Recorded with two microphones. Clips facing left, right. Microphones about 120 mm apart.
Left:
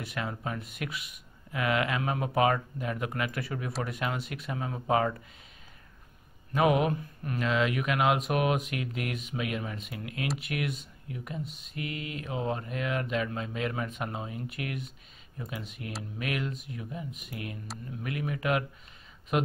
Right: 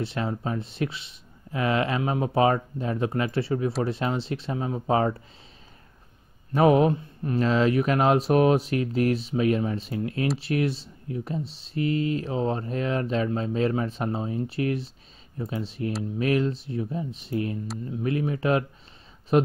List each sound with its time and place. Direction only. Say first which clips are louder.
0.0 s speech: right 6 dB; 30° right (ahead or behind)
6.5 s speech: right 6 dB; 35° right (ahead or behind)